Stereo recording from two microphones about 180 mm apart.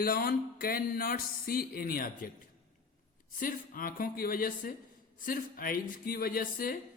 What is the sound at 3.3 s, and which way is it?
Speech, 50° left (ahead or behind).